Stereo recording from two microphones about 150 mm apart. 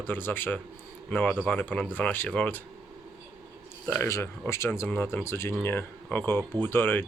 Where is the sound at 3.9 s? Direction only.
15° left (ahead or behind).